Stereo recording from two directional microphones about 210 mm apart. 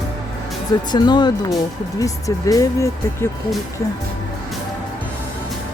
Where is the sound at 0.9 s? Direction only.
20° left (ahead or behind).